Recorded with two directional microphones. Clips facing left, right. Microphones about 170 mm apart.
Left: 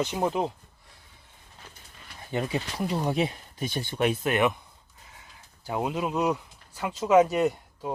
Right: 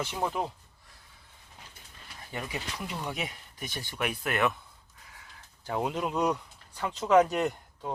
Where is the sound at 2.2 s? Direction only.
25° left (ahead or behind).